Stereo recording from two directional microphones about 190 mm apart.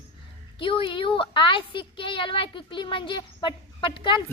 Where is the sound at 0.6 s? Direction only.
25° left (ahead or behind).